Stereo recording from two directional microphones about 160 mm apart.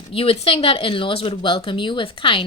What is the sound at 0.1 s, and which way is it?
Speech, 35° left (ahead or behind).